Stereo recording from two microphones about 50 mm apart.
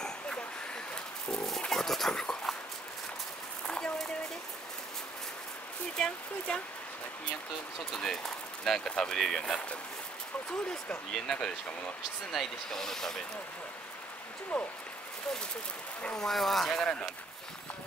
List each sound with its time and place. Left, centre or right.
1.3 s speech: centre
1.7 s dog: centre
3.6 s a sound: left
5.9 s speech: centre
7.9 s speech: centre
14.5 s speech: centre
16.2 s speech: centre